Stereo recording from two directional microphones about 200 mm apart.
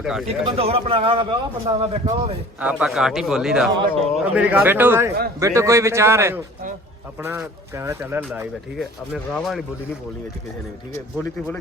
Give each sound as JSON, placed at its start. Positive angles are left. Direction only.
{"t": 0.0, "sound": "speech", "side_deg": 0}
{"t": 0.4, "sound": "a man's voice", "side_deg": -30}
{"t": 2.6, "sound": "a man's voice", "side_deg": -5}
{"t": 8.8, "sound": "speech", "side_deg": 0}
{"t": 10.9, "sound": "speech", "side_deg": 15}